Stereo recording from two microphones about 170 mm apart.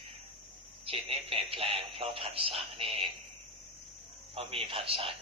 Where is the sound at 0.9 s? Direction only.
35° right (ahead or behind).